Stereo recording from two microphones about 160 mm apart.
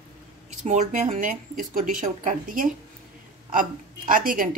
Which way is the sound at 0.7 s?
50° right (ahead or behind).